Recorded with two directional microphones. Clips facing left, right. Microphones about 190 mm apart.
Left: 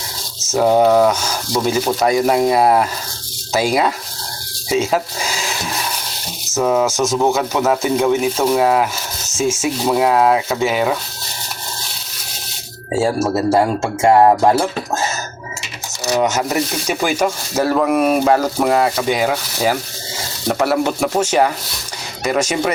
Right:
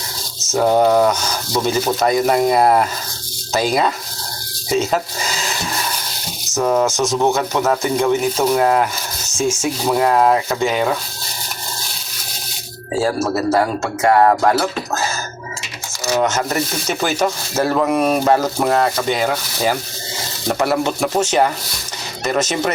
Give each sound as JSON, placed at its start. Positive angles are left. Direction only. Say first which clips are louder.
{"t": 0.5, "sound": "speech", "louder": "left 1 dB", "side_deg": 5}
{"t": 4.7, "sound": "a sound", "louder": "left 1 dB", "side_deg": 5}
{"t": 6.5, "sound": "speech", "louder": "left 1 dB", "side_deg": 5}
{"t": 12.9, "sound": "speech", "louder": "left 1 dB", "side_deg": 25}
{"t": 16.2, "sound": "speech", "louder": "left 1 dB", "side_deg": 10}